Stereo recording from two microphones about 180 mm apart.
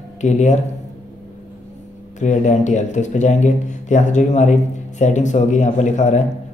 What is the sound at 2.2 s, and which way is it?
Speech, 40° left (ahead or behind).